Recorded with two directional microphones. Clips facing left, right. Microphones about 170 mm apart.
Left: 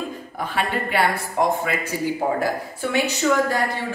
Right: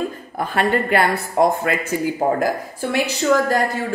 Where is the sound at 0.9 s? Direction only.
50° right (ahead or behind).